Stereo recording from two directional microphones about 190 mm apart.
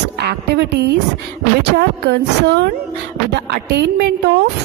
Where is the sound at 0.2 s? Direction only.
60° right (ahead or behind).